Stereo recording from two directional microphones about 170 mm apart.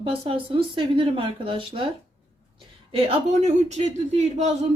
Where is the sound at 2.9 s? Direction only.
35° right (ahead or behind).